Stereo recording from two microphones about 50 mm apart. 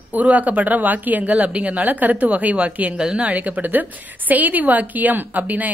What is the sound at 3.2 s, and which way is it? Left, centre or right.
Speech, right.